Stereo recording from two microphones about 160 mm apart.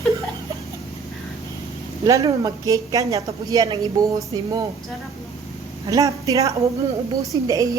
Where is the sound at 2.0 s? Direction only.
20° right (ahead or behind).